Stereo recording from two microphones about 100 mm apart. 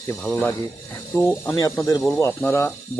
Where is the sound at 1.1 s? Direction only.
25° left (ahead or behind).